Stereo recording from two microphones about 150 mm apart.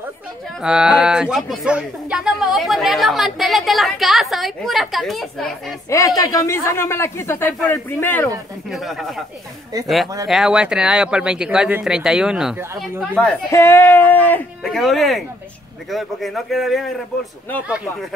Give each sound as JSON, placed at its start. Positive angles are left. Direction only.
{"t": 0.6, "sound": "speech", "side_deg": -5}
{"t": 5.9, "sound": "speech", "side_deg": 20}
{"t": 8.6, "sound": "speech", "side_deg": 0}
{"t": 10.2, "sound": "speech", "side_deg": 0}
{"t": 13.1, "sound": "speech", "side_deg": 5}
{"t": 13.5, "sound": "speech", "side_deg": 15}
{"t": 14.6, "sound": "speech", "side_deg": 0}